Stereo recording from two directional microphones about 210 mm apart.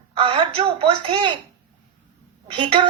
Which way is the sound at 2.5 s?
25° right (ahead or behind).